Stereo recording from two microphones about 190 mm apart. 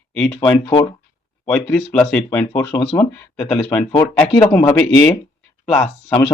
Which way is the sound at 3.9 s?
15° left (ahead or behind).